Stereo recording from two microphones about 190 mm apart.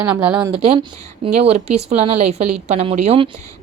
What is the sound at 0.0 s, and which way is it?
Speech, 5° right (ahead or behind).